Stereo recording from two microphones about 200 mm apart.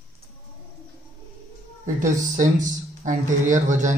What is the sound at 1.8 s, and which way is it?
Speech, 40° right (ahead or behind).